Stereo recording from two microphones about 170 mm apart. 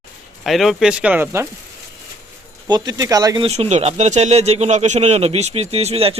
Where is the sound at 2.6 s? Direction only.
25° right (ahead or behind).